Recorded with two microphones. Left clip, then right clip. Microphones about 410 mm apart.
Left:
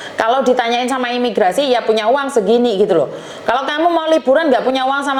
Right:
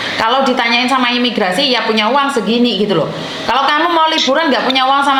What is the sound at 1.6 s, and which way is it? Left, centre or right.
A man's voice, left.